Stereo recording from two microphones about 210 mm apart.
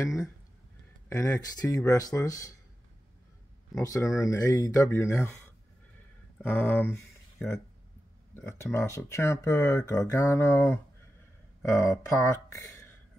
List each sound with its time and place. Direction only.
0.0 s speech: 15° left (ahead or behind)
3.7 s speech: 15° left (ahead or behind)
6.3 s speech: 10° left (ahead or behind)